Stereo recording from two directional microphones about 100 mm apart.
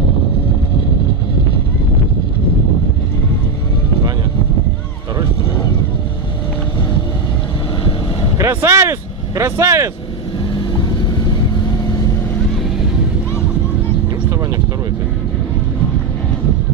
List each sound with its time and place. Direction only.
8.4 s vehicle: 25° right (ahead or behind)